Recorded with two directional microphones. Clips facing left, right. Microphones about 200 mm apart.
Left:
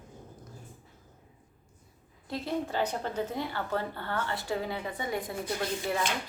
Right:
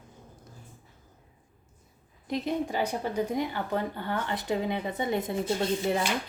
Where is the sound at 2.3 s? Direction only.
15° right (ahead or behind).